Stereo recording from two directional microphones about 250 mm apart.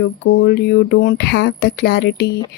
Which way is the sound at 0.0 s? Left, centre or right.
Left.